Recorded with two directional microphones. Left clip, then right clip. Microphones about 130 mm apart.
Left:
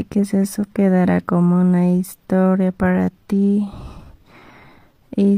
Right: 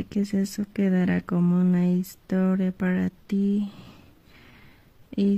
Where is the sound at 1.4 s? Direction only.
30° left (ahead or behind).